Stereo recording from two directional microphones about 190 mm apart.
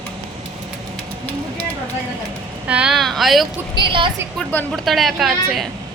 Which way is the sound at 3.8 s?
25° right (ahead or behind).